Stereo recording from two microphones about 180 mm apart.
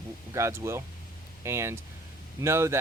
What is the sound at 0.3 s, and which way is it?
Speech, 15° right (ahead or behind).